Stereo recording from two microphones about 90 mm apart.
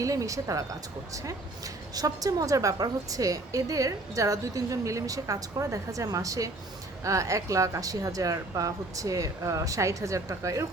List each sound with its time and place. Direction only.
0.0 s speech: 40° right (ahead or behind)